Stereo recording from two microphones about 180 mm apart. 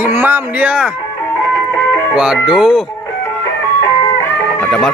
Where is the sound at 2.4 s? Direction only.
Centre (ahead or behind).